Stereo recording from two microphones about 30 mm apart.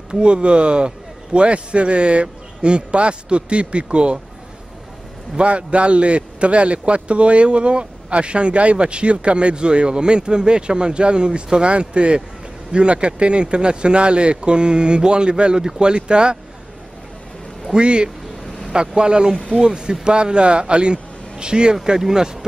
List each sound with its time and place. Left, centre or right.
0.1 s a man's voice: right
5.4 s a man's voice: right
17.7 s a man's voice: right